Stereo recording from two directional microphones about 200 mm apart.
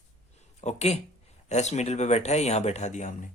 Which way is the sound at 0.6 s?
35° left (ahead or behind).